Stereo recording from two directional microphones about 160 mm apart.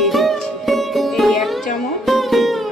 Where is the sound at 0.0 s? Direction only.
Centre (ahead or behind).